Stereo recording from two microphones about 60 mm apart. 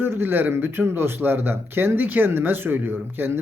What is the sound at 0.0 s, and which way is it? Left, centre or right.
Speech, right.